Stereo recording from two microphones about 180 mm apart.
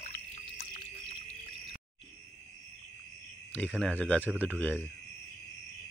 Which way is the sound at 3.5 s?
5° left (ahead or behind).